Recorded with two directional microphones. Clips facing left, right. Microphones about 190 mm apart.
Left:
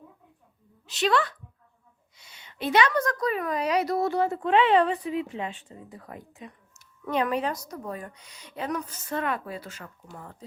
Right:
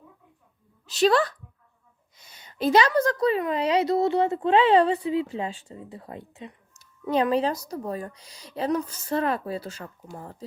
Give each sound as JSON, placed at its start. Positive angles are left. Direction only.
{"t": 0.9, "sound": "a woman's voice", "side_deg": -35}